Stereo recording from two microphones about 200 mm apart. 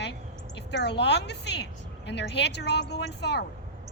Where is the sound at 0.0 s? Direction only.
60° left (ahead or behind).